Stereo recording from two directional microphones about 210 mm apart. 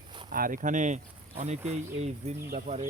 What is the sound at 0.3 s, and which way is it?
Speech, 40° right (ahead or behind).